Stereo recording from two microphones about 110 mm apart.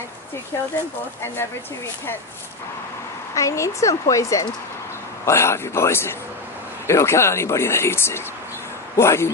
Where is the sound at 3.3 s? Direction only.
30° left (ahead or behind).